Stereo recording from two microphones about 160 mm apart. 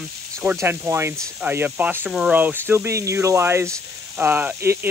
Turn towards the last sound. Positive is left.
turn(degrees=-15)  # may be behind; listen again after turning